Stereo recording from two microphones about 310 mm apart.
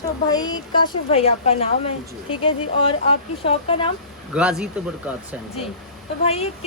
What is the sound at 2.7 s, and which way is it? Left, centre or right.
Speech, centre.